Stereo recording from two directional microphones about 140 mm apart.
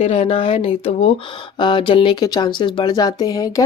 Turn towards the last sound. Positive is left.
turn(degrees=25)  # may be behind; listen again after turning